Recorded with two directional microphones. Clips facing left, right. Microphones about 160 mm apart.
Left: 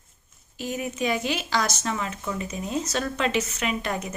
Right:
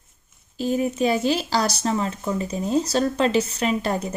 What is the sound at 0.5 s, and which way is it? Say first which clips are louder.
Speech: right 7 dB; 30° right (ahead or behind).